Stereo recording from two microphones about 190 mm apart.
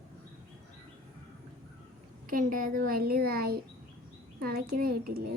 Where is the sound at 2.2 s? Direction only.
45° right (ahead or behind).